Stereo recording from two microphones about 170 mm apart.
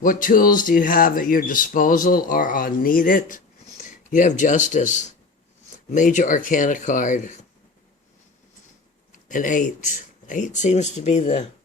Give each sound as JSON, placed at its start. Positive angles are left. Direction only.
{"t": 0.0, "sound": "speech", "side_deg": 55}
{"t": 9.3, "sound": "speech", "side_deg": 50}